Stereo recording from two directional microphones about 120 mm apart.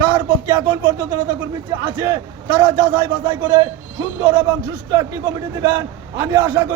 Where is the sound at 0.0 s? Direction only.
30° right (ahead or behind).